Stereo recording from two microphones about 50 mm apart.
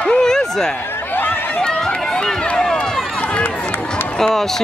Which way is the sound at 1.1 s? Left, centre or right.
Left.